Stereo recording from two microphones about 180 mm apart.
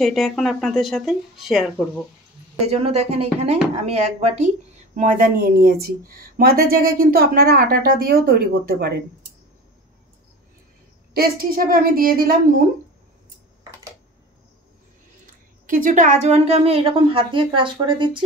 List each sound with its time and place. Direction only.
0.0 s speech: centre (ahead or behind)
2.6 s a woman's voice: 35° right (ahead or behind); by 9.0 s 60° right (ahead or behind)
11.1 s speech: 55° right (ahead or behind)
15.2 s a woman's voice: 50° right (ahead or behind); by 18.2 s 25° right (ahead or behind)